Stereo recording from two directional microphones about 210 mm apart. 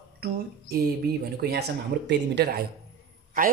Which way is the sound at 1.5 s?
50° right (ahead or behind).